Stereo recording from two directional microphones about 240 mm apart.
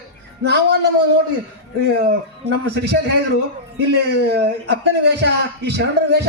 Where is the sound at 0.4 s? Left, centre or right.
Right.